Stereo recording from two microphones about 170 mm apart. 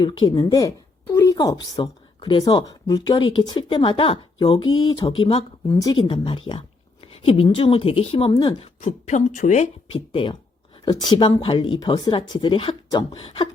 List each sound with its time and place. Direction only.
0.0 s a woman's voice: 30° left (ahead or behind)
10.1 s speech: 30° left (ahead or behind)